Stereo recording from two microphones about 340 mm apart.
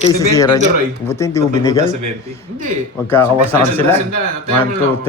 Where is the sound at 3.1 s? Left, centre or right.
Centre.